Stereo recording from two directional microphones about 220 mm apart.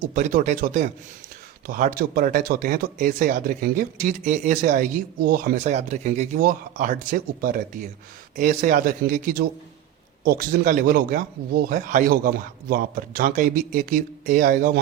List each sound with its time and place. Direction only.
0.1 s a man's voice: 35° right (ahead or behind)